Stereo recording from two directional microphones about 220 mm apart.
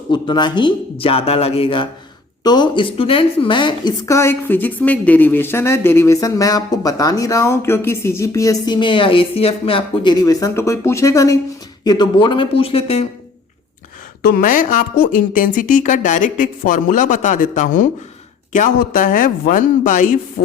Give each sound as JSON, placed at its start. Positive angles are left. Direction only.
{"t": 0.1, "sound": "a woman's voice", "side_deg": 20}
{"t": 14.2, "sound": "a woman's voice", "side_deg": 40}